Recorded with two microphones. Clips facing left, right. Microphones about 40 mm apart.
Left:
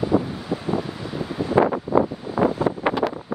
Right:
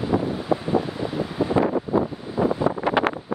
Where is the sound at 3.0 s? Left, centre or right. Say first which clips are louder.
Right 2 dB; right.